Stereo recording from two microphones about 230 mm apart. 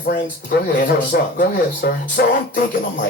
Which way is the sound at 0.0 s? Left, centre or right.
Left.